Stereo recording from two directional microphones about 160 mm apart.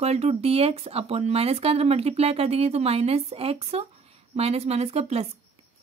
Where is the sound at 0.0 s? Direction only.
40° right (ahead or behind).